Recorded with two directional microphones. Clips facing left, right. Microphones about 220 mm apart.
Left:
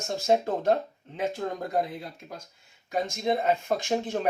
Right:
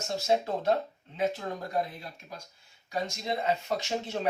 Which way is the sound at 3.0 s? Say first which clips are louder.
Left 5 dB; 50° left (ahead or behind).